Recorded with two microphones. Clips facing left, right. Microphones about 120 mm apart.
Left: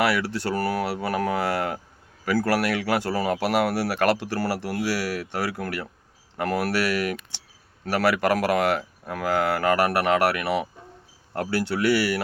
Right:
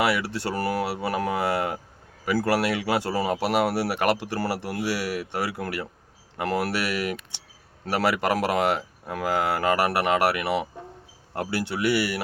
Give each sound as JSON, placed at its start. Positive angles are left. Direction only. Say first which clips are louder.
{"t": 0.0, "sound": "speech", "louder": "left 1 dB", "side_deg": -20}